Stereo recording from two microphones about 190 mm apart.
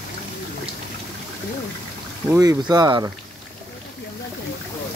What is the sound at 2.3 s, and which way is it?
Speech, 20° right (ahead or behind).